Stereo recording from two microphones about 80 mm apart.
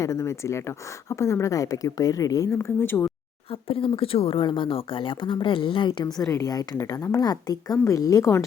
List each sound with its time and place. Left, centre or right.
0.0 s speech: left
2.6 s speech: left
4.4 s speech: left
6.3 s speech: left
6.7 s speech: left